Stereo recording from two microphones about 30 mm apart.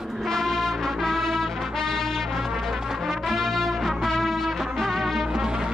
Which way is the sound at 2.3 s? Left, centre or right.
Centre.